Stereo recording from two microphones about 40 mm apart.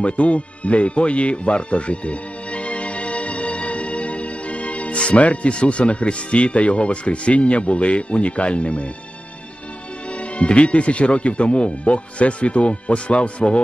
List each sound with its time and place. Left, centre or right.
0.0 s speech: left
10.3 s speech: left